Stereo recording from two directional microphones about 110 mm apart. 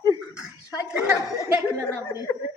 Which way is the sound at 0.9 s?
10° right (ahead or behind).